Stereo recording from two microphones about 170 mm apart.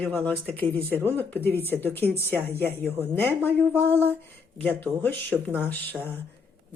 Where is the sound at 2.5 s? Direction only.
10° left (ahead or behind).